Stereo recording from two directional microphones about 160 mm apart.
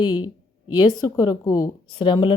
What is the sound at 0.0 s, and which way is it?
A woman's voice, 30° left (ahead or behind).